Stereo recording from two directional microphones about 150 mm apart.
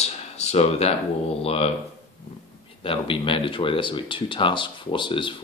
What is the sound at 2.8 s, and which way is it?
Speech, 35° left (ahead or behind).